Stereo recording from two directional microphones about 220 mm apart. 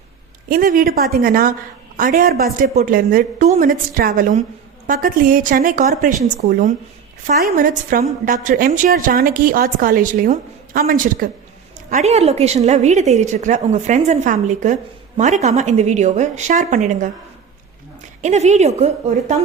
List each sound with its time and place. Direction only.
0.4 s a woman's voice: 40° right (ahead or behind)
18.2 s a woman's voice: 30° right (ahead or behind)